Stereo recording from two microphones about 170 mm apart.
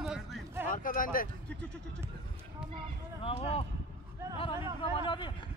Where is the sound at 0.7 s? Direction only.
55° left (ahead or behind).